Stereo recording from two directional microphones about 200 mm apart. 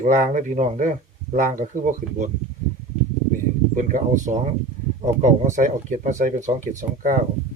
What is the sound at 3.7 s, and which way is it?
Speech, 40° right (ahead or behind).